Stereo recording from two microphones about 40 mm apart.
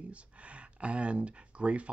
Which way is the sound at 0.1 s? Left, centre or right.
Right.